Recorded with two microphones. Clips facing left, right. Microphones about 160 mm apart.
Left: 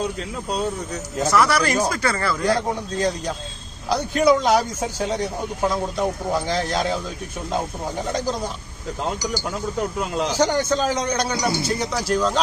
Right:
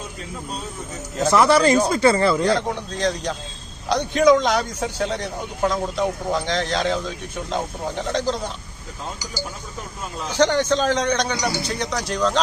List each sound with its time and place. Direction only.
1.3 s speech: 25° right (ahead or behind)
2.5 s a man's voice: 10° left (ahead or behind)
10.0 s speech: 80° left
10.3 s a man's voice: 10° left (ahead or behind)